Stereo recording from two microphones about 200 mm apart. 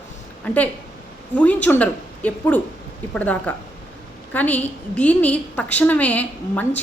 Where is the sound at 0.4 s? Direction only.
5° left (ahead or behind).